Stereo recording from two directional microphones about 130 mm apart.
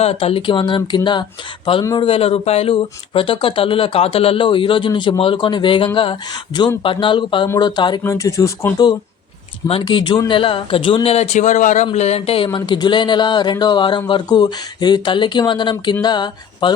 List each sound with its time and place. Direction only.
0.0 s speech: 50° left (ahead or behind)
2.0 s speech: 45° left (ahead or behind)
7.4 s speech: 25° left (ahead or behind)
7.8 s speech: 35° left (ahead or behind)
8.0 s speech: 25° left (ahead or behind)
9.6 s speech: 45° left (ahead or behind); by 11.9 s 70° left (ahead or behind)
11.9 s speech: 55° left (ahead or behind)
12.5 s speech: 35° left (ahead or behind)